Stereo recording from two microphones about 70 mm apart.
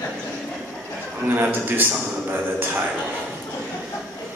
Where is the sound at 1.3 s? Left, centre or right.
Right.